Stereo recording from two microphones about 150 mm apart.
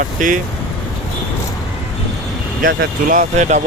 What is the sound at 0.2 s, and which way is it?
Speech, 60° right (ahead or behind).